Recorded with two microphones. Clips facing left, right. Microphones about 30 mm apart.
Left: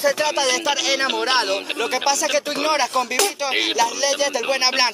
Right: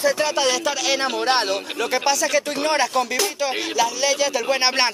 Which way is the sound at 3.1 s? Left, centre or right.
Left.